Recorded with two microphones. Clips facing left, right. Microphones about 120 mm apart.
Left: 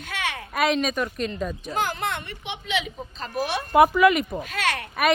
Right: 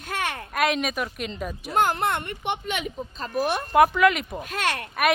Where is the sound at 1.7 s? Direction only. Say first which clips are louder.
Right 6 dB; 55° right (ahead or behind).